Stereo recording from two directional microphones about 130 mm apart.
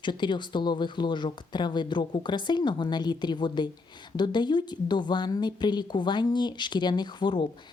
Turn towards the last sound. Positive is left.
turn(degrees=35)  # may be behind; listen again after turning